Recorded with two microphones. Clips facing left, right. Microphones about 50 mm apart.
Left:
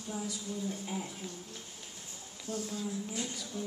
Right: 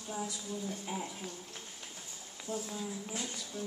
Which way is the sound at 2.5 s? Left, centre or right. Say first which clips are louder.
Left 2 dB; centre.